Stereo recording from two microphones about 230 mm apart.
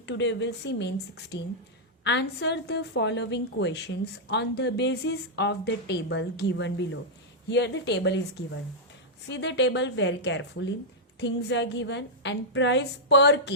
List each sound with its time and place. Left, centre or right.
0.0 s a woman's voice: left